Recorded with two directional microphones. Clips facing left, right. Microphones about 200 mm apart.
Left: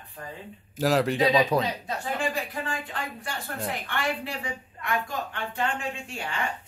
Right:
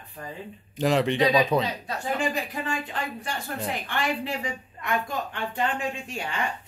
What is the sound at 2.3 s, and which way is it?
Speech, 20° right (ahead or behind).